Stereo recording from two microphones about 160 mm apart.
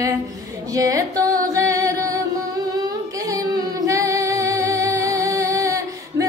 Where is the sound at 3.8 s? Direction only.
20° right (ahead or behind).